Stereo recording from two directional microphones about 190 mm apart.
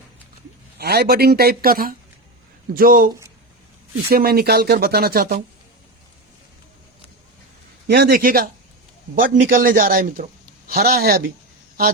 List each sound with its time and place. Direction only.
0.8 s speech: 55° right (ahead or behind)
4.1 s speech: 55° right (ahead or behind)
7.9 s speech: 55° right (ahead or behind)